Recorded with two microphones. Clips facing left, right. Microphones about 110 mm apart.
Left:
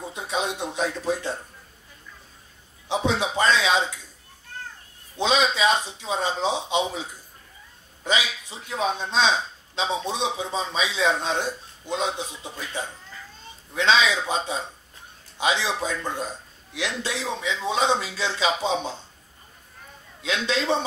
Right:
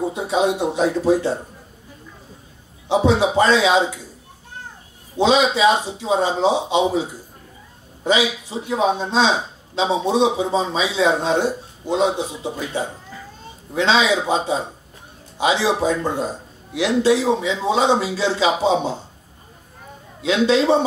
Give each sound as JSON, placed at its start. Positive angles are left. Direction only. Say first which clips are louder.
{"t": 0.1, "sound": "a man's voice", "louder": "right 9 dB", "side_deg": -15}
{"t": 2.9, "sound": "a man's voice", "louder": "right 8 dB", "side_deg": -15}
{"t": 5.2, "sound": "a man's voice", "louder": "right 6 dB", "side_deg": -15}
{"t": 20.2, "sound": "a man's voice", "louder": "right 9 dB", "side_deg": -20}